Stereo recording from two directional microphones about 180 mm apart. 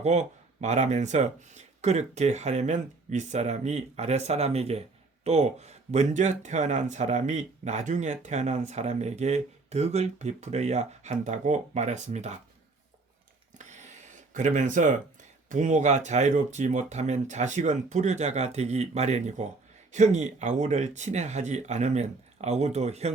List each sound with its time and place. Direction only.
0.0 s speech: 40° right (ahead or behind)
13.6 s speech: 40° right (ahead or behind)